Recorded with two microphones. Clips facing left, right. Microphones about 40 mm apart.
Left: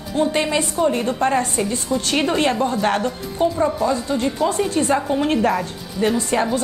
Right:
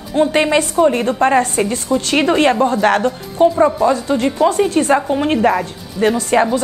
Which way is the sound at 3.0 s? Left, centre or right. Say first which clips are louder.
Right 7 dB; right.